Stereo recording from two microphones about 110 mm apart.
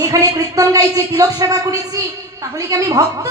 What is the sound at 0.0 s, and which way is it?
A man's voice, 35° right (ahead or behind).